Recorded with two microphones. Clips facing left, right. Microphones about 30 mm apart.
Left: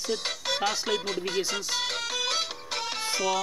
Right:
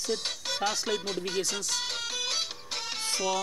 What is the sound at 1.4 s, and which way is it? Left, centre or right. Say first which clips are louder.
Speech: left 2 dB; centre.